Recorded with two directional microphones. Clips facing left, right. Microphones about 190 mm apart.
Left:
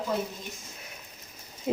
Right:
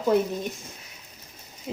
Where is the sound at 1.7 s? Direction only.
55° left (ahead or behind).